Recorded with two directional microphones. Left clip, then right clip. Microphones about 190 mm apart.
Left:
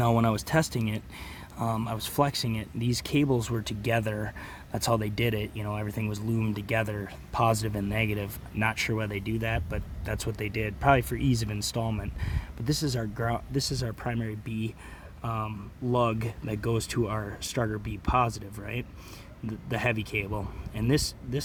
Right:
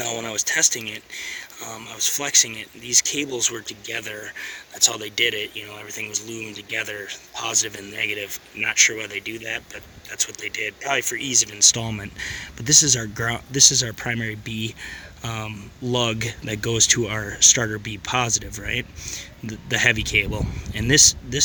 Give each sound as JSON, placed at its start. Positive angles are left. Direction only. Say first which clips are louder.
{"t": 0.0, "sound": "speech", "louder": "even", "side_deg": 10}